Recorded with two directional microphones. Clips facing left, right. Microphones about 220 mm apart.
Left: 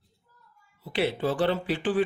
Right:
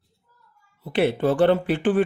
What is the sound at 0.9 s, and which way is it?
Speech, 55° right (ahead or behind).